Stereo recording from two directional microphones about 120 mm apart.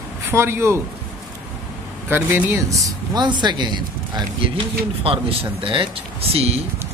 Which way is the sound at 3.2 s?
40° right (ahead or behind).